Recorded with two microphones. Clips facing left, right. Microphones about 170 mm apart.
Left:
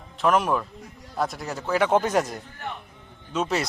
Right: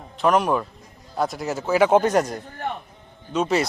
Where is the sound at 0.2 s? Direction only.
Centre (ahead or behind).